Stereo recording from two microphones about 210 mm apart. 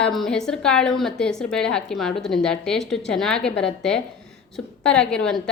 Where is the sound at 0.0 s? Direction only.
Centre (ahead or behind).